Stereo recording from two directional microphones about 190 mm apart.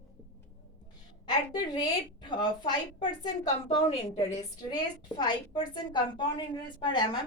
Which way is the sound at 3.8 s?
30° left (ahead or behind).